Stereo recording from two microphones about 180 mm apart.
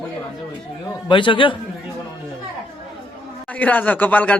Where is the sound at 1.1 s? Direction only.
25° left (ahead or behind).